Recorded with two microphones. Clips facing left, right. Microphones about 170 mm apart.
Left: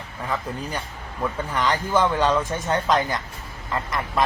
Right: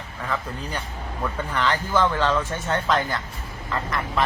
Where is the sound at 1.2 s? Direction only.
10° left (ahead or behind).